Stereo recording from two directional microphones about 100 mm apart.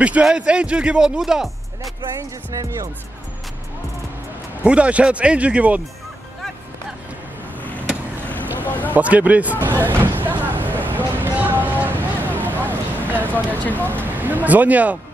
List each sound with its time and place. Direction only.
0.0 s speech: 10° right (ahead or behind)
2.5 s speech: 35° right (ahead or behind)
4.6 s speech: 10° right (ahead or behind)
8.5 s speech: 20° left (ahead or behind)
8.9 s speech: 15° right (ahead or behind)
9.6 s a sound: 20° right (ahead or behind)
14.1 s speech: 15° right (ahead or behind)